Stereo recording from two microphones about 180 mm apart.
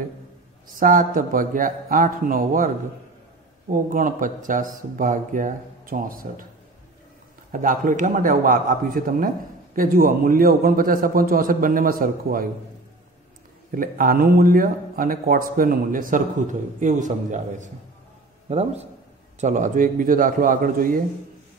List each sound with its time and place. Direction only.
0.7 s a man's voice: 50° right (ahead or behind)
7.5 s a man's voice: 50° right (ahead or behind)
13.7 s a man's voice: 50° right (ahead or behind)